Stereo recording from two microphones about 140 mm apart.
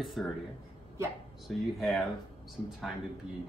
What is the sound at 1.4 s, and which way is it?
Speech, centre (ahead or behind).